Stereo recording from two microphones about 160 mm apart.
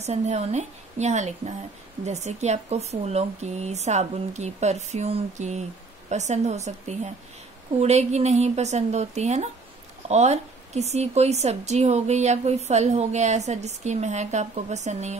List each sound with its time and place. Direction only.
0.0 s a woman's voice: 45° right (ahead or behind)